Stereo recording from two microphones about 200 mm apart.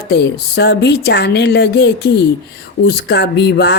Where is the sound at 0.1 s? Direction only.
55° left (ahead or behind).